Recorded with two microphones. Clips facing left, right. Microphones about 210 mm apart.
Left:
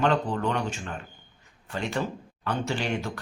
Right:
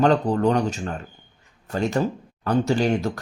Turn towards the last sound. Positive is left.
turn(degrees=-40)  # may be behind; listen again after turning